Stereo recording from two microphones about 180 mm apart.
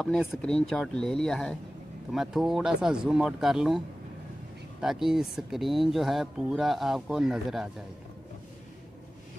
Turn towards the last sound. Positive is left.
turn(degrees=0)  # may be behind; listen again after turning